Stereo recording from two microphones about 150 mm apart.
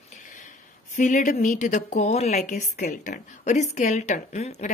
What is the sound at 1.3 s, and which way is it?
Speech, 65° left (ahead or behind).